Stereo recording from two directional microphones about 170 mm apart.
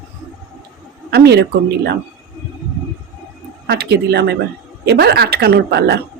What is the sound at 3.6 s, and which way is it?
A woman's voice, 70° right (ahead or behind).